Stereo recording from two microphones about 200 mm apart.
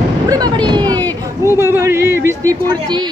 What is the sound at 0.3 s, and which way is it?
A woman's voice, 20° right (ahead or behind).